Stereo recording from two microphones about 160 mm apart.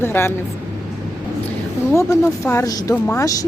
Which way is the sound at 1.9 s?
20° left (ahead or behind).